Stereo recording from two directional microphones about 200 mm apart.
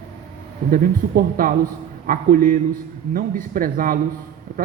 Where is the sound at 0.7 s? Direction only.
45° right (ahead or behind).